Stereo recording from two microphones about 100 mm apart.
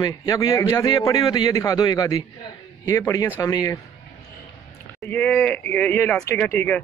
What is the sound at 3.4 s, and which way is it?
Speech, 35° left (ahead or behind).